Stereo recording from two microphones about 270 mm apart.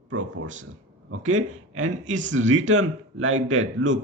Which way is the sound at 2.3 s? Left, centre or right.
Right.